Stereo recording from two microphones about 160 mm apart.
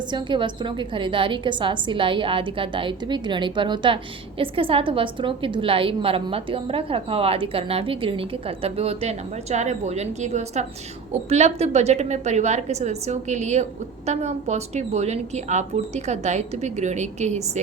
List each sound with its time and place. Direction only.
0.1 s a woman's voice: 30° right (ahead or behind); by 17.6 s 45° right (ahead or behind)